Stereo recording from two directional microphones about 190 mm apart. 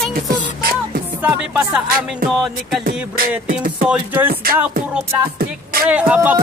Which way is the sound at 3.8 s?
10° right (ahead or behind).